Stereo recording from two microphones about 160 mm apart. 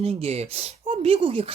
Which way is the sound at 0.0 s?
40° right (ahead or behind).